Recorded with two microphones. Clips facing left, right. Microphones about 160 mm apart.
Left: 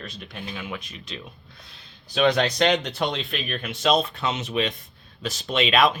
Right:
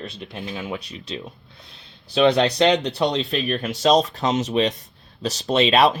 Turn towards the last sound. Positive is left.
turn(degrees=-35)  # may be behind; listen again after turning